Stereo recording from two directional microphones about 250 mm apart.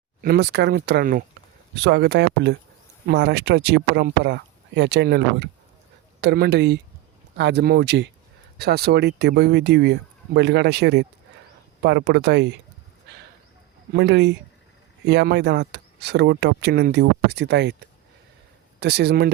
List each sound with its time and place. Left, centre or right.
0.2 s speech: right
13.9 s speech: right
18.8 s speech: right